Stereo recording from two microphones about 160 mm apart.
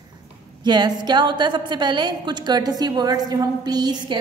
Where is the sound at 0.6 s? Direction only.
25° right (ahead or behind).